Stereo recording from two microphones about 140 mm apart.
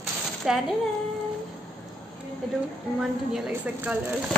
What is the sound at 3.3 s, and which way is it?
Speech, 5° right (ahead or behind).